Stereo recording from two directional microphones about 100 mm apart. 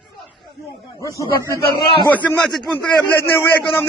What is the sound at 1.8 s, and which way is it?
Speech, 55° left (ahead or behind).